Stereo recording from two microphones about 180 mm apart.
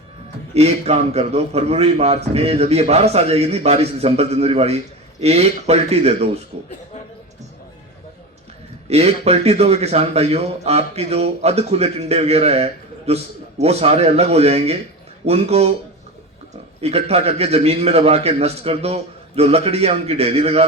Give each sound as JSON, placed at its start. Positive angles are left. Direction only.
{"t": 0.5, "sound": "a man's voice", "side_deg": -35}
{"t": 8.9, "sound": "a man's voice", "side_deg": -35}
{"t": 16.8, "sound": "a man's voice", "side_deg": -35}